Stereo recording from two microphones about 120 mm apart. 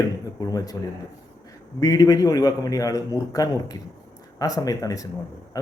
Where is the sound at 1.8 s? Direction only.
30° left (ahead or behind).